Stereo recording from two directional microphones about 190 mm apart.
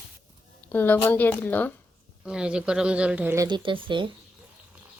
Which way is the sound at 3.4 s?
25° right (ahead or behind).